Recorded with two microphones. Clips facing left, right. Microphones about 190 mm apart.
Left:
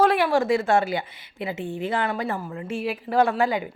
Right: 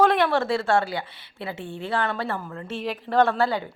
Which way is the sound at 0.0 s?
10° left (ahead or behind).